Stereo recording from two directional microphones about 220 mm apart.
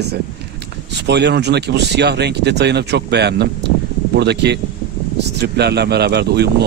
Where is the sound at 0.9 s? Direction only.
50° right (ahead or behind).